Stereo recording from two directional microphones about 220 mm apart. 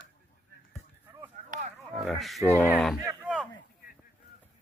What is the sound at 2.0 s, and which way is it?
Speech, centre (ahead or behind).